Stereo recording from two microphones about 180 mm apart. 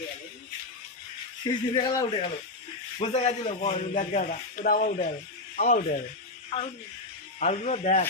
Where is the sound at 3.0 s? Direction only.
35° left (ahead or behind).